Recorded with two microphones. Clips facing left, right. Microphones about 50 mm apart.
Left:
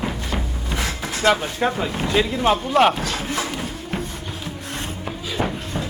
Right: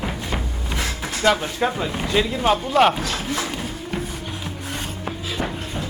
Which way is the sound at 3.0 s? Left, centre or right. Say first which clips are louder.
Even; centre.